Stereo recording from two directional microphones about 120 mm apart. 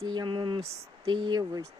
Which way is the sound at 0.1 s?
40° right (ahead or behind).